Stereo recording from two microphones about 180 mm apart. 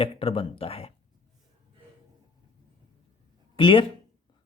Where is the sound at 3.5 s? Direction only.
30° left (ahead or behind).